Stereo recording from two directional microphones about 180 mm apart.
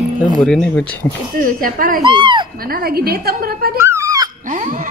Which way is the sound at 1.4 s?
50° right (ahead or behind).